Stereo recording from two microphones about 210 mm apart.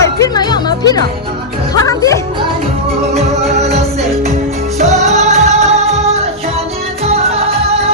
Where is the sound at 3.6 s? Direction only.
30° right (ahead or behind).